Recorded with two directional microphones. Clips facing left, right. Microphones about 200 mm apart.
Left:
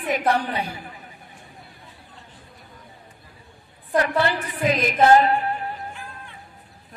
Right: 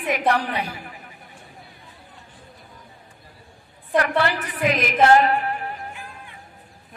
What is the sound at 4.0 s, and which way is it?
A woman's voice, 25° left (ahead or behind).